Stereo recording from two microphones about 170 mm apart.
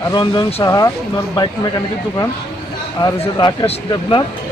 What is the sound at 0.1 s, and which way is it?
Speech, 25° left (ahead or behind).